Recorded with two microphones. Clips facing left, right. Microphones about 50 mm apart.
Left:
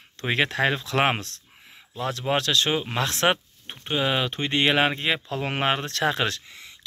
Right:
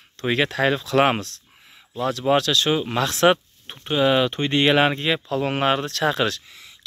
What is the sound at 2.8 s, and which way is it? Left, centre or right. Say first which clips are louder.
Speech: right 5 dB; centre.